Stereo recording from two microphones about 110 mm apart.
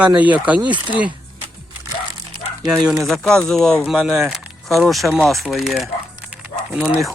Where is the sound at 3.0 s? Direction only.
5° left (ahead or behind).